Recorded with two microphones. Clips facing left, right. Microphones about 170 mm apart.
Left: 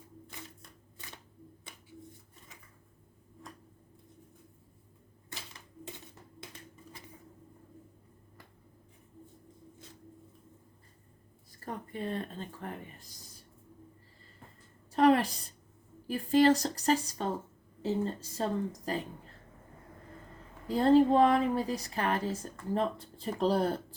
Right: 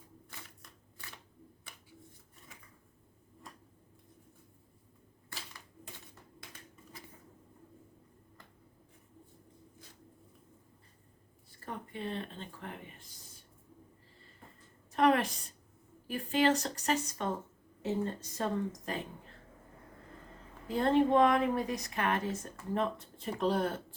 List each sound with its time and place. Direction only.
0.3 s typewriter: 20° left (ahead or behind)
5.3 s typewriter: 20° left (ahead or behind)
11.6 s a woman's voice: 40° left (ahead or behind)
14.9 s a sound: 35° left (ahead or behind)
16.0 s a woman's voice: 35° left (ahead or behind)
20.7 s a woman's voice: 35° left (ahead or behind)